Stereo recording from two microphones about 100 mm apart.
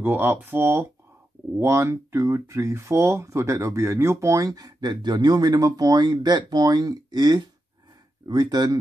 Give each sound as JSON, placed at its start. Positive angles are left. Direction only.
{"t": 0.0, "sound": "speech", "side_deg": -20}